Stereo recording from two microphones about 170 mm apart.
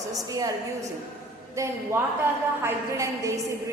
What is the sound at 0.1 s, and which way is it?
Speech, 20° right (ahead or behind).